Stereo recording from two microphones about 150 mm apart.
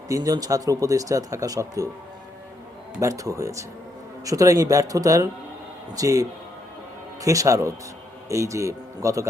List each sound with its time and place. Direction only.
0.1 s speech: 25° right (ahead or behind)
3.0 s speech: 20° right (ahead or behind)